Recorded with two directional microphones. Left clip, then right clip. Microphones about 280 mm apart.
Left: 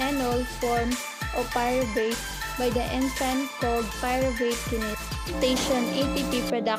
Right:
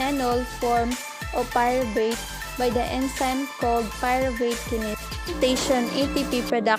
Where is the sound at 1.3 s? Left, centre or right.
Right.